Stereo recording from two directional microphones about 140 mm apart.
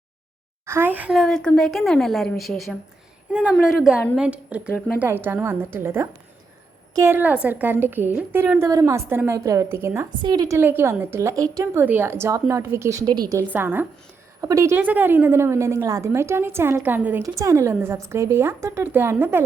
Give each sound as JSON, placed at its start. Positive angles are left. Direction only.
{"t": 0.6, "sound": "a woman's voice", "side_deg": -15}
{"t": 1.1, "sound": "a woman's voice", "side_deg": 0}
{"t": 10.2, "sound": "speech", "side_deg": -30}
{"t": 10.6, "sound": "speech", "side_deg": -15}
{"t": 13.5, "sound": "a woman's voice", "side_deg": -15}
{"t": 17.2, "sound": "speech", "side_deg": -25}